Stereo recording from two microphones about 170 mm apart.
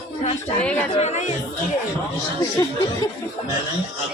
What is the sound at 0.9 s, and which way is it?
Speech, 40° left (ahead or behind).